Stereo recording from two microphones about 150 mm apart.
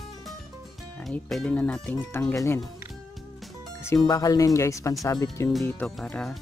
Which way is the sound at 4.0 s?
25° left (ahead or behind).